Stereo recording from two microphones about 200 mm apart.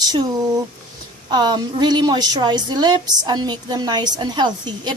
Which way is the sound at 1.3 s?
20° right (ahead or behind).